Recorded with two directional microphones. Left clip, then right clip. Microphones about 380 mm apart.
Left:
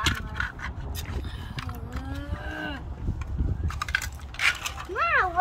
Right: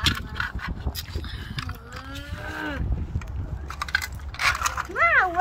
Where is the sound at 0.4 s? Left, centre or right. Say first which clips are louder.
Right 2 dB; centre.